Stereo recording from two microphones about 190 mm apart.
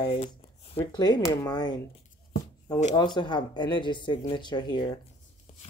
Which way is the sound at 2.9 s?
25° left (ahead or behind).